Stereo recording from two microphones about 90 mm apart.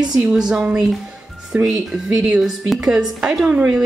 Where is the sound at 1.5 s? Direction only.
10° right (ahead or behind).